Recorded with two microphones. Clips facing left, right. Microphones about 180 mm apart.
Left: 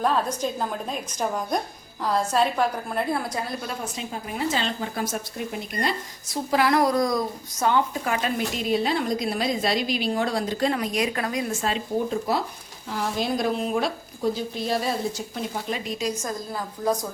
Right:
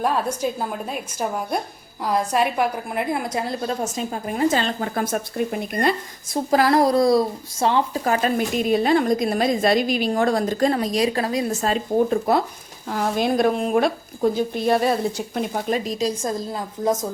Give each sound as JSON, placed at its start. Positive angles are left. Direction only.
{"t": 0.0, "sound": "a woman's voice", "side_deg": -10}
{"t": 3.7, "sound": "speech", "side_deg": -45}
{"t": 6.3, "sound": "a woman's voice", "side_deg": -40}
{"t": 16.8, "sound": "speech", "side_deg": -20}